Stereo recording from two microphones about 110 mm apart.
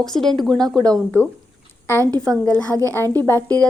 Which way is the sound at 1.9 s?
25° right (ahead or behind).